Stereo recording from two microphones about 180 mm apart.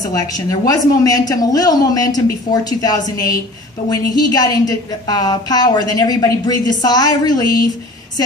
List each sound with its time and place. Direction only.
0.0 s a woman's voice: 20° left (ahead or behind)